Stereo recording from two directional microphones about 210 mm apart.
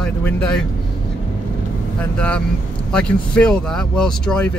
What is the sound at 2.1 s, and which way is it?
Speech, 5° left (ahead or behind).